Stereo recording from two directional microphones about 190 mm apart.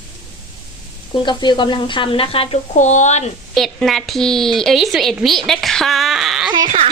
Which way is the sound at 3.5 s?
Centre (ahead or behind).